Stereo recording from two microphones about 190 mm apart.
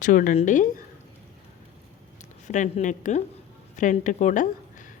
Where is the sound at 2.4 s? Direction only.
40° left (ahead or behind).